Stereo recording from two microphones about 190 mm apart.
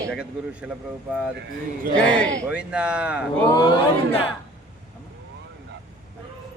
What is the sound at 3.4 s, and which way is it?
Speech, 20° left (ahead or behind).